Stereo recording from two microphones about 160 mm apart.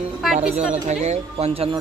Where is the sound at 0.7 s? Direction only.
45° right (ahead or behind).